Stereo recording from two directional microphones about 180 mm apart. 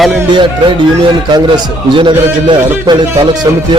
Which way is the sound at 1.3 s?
25° right (ahead or behind).